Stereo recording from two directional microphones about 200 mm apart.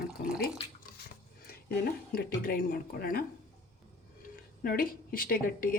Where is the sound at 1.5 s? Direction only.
50° left (ahead or behind).